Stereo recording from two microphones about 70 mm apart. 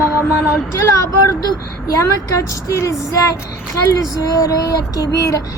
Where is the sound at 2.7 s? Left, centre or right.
Left.